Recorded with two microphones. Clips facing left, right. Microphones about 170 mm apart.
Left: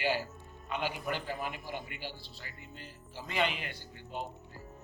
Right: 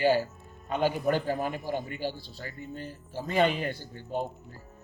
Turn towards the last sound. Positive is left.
turn(degrees=-45)  # may be behind; listen again after turning